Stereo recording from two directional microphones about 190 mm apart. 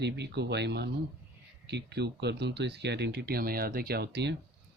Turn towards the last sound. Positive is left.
turn(degrees=-60)  # may be behind; listen again after turning